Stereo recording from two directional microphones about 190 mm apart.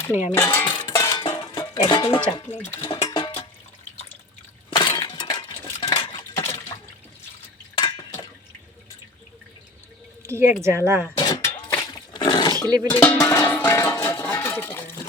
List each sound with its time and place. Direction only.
0.3 s cutlery: 10° left (ahead or behind)
0.8 s music: 20° left (ahead or behind)
2.3 s speech: 25° left (ahead or behind)
2.6 s cutlery: 15° left (ahead or behind)
2.9 s music: 25° left (ahead or behind)
4.7 s cutlery: 20° left (ahead or behind)
7.8 s a sound: 25° left (ahead or behind)
10.2 s speech: 15° right (ahead or behind)
11.2 s a sound: 20° left (ahead or behind)
11.8 s roaring cats: 20° left (ahead or behind)
12.5 s speech: 20° right (ahead or behind)
13.0 s music: 10° left (ahead or behind)